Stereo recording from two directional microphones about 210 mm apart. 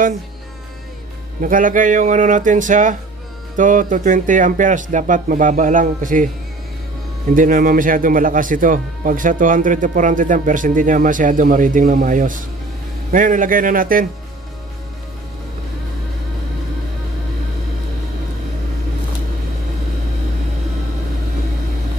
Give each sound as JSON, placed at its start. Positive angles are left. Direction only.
{"t": 1.4, "sound": "speech", "side_deg": -40}
{"t": 7.3, "sound": "speech", "side_deg": -40}